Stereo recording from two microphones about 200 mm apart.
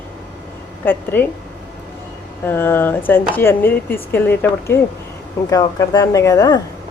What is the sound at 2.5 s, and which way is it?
Speech, 10° left (ahead or behind).